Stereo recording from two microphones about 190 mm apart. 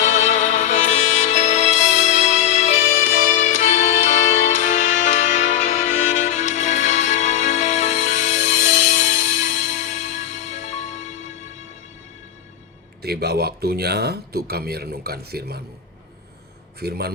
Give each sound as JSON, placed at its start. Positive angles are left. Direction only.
{"t": 0.0, "sound": "music", "side_deg": 40}
{"t": 13.0, "sound": "speech", "side_deg": -55}
{"t": 16.8, "sound": "speech", "side_deg": -55}